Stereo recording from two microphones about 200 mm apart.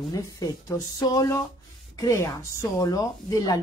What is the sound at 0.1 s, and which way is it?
Speech, 15° left (ahead or behind).